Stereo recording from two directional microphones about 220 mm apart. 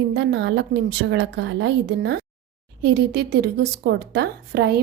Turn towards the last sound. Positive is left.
turn(degrees=-45)  # may be behind; listen again after turning